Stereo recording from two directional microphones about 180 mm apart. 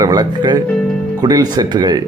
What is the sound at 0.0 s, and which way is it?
Speech, 20° right (ahead or behind).